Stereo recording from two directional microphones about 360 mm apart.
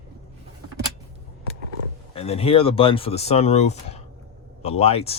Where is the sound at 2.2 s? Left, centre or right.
Centre.